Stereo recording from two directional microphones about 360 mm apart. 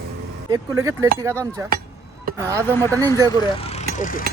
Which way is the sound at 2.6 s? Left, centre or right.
Centre.